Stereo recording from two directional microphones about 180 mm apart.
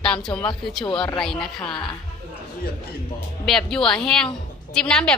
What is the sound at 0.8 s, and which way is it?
Speech, 25° left (ahead or behind).